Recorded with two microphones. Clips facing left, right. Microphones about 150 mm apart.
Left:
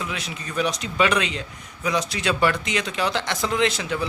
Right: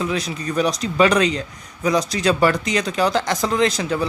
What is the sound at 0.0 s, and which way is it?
A man's voice, 35° right (ahead or behind).